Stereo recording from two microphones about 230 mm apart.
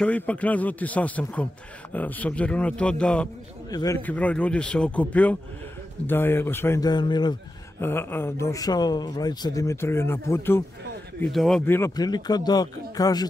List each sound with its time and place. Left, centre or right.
0.0 s a man's voice: centre